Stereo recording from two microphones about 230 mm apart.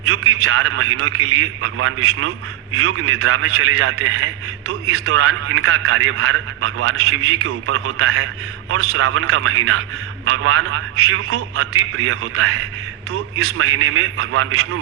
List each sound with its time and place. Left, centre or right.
0.0 s a man's voice: right